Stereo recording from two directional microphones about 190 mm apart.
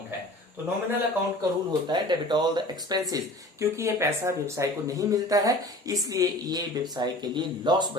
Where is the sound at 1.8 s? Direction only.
25° right (ahead or behind).